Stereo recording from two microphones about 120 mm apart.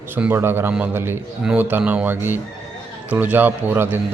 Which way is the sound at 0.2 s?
15° right (ahead or behind).